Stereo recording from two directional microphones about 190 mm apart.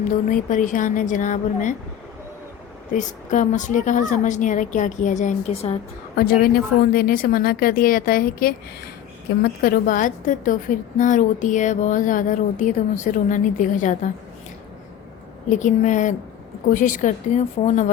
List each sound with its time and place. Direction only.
0.3 s a woman's voice: 45° left (ahead or behind)
2.9 s a woman's voice: 40° left (ahead or behind)
6.1 s a woman's voice: 50° left (ahead or behind)
15.4 s a woman's voice: 40° left (ahead or behind)